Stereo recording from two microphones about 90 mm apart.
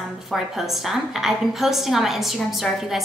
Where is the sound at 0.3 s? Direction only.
Centre (ahead or behind).